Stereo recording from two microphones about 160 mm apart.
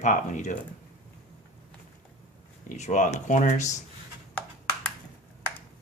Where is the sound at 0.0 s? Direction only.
50° left (ahead or behind).